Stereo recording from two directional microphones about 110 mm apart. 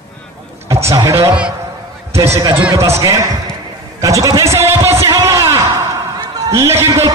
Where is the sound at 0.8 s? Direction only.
25° right (ahead or behind).